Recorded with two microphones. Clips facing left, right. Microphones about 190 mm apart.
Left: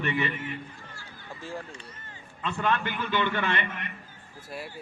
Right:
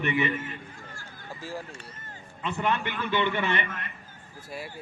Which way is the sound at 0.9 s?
45° right (ahead or behind).